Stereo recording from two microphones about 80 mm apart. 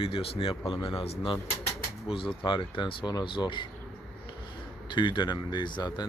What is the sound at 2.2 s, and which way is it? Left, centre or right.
Speech, left.